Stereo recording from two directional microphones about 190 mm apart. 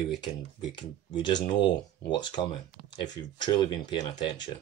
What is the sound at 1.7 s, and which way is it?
Speech, 25° left (ahead or behind).